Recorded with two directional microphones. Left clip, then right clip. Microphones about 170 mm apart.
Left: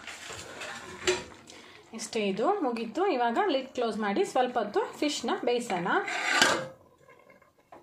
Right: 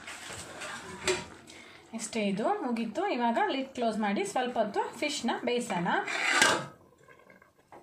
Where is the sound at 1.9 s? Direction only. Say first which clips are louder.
Left 2 dB; 25° left (ahead or behind).